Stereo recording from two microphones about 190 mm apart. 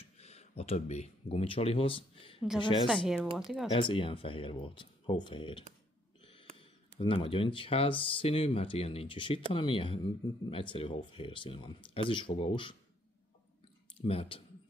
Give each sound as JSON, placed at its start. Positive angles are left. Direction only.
{"t": 0.2, "sound": "speech", "side_deg": 35}
{"t": 2.9, "sound": "speech", "side_deg": 0}
{"t": 3.7, "sound": "speech", "side_deg": 25}
{"t": 13.9, "sound": "speech", "side_deg": 30}